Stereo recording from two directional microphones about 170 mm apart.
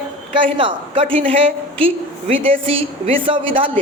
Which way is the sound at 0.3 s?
30° right (ahead or behind).